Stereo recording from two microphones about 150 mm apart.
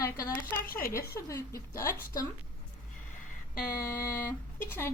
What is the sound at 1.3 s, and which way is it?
Speech, 20° left (ahead or behind).